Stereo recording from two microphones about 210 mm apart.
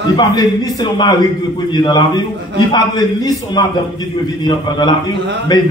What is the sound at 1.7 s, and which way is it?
A man's voice, 20° left (ahead or behind).